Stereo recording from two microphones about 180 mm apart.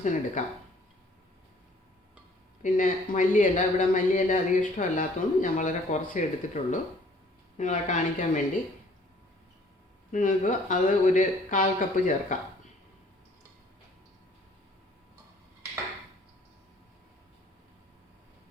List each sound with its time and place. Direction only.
0.0 s speech: 45° left (ahead or behind)
2.6 s speech: 45° left (ahead or behind)
10.1 s speech: 45° left (ahead or behind)